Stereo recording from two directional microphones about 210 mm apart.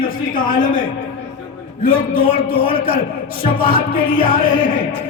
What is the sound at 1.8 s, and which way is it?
Speech, 25° left (ahead or behind).